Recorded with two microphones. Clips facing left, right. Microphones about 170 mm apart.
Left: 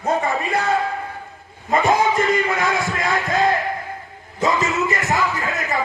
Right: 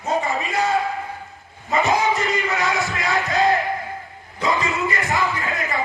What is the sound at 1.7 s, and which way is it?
Music, 50° left (ahead or behind).